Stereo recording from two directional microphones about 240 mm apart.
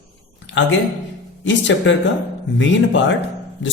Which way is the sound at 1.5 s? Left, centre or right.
Left.